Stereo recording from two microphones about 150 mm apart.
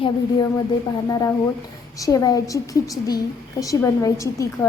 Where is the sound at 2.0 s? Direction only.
20° left (ahead or behind).